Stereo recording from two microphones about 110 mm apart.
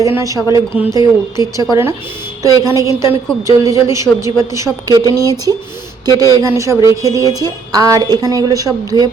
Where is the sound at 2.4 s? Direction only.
35° right (ahead or behind).